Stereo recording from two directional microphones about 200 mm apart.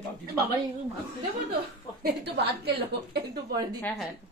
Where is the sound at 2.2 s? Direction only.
55° right (ahead or behind).